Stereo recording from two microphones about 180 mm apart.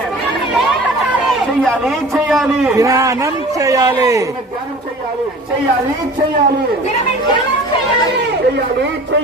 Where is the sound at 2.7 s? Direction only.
15° right (ahead or behind).